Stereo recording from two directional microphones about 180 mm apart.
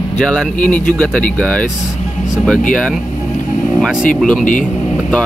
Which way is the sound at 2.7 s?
5° left (ahead or behind).